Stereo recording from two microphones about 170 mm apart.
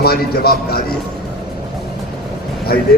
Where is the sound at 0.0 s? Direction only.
65° left (ahead or behind).